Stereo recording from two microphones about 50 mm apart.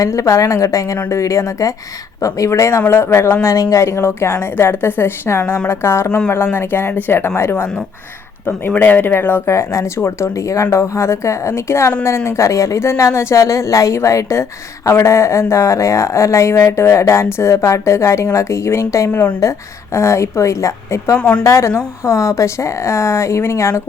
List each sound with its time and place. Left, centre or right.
0.0 s a woman's voice: left
2.9 s a woman's voice: left
3.4 s a woman's voice: left
8.4 s speech: left
9.5 s speech: left
10.2 s speech: left
14.8 s speech: left
21.2 s a woman's voice: left
21.4 s speech: left
22.0 s speech: left